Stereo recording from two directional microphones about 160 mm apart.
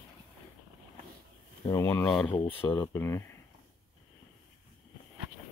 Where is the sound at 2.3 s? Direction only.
35° left (ahead or behind).